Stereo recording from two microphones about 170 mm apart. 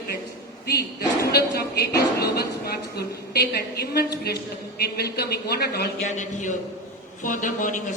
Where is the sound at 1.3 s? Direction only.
70° left (ahead or behind).